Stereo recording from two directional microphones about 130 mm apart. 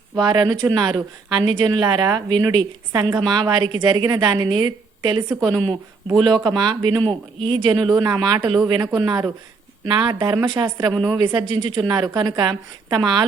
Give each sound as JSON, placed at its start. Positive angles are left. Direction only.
{"t": 0.2, "sound": "a man's voice", "side_deg": -30}